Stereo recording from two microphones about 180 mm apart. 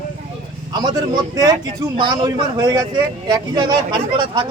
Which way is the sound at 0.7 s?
20° right (ahead or behind).